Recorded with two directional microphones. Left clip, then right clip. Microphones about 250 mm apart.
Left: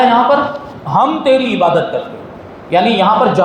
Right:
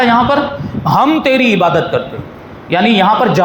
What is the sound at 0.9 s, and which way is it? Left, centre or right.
A man's voice, right.